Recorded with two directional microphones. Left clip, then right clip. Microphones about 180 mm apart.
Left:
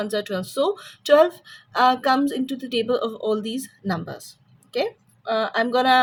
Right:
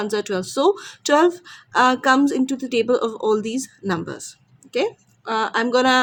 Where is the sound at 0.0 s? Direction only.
40° right (ahead or behind).